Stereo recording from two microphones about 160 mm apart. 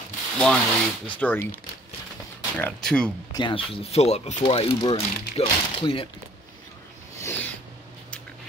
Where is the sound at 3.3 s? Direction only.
30° left (ahead or behind).